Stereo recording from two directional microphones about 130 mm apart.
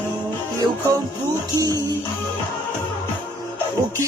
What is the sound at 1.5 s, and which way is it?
Music, 30° right (ahead or behind).